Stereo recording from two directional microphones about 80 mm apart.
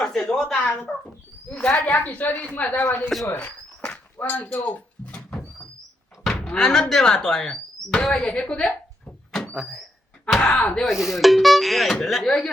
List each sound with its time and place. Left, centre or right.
0.0 s speech: centre
3.3 s a sound: centre
6.2 s speech: centre
9.3 s a sound: centre
9.6 s speech: centre
10.3 s speech: centre
10.8 s speech: centre